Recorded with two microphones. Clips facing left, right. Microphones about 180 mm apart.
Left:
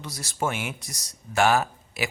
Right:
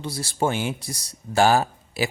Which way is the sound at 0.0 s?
30° right (ahead or behind).